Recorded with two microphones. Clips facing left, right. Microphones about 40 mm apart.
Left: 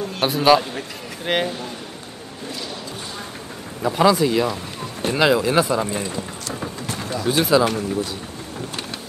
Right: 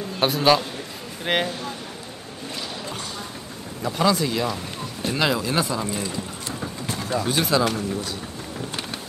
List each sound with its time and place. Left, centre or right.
0.2 s a man's voice: centre
3.8 s speech: centre
6.9 s a sound: left
7.2 s speech: centre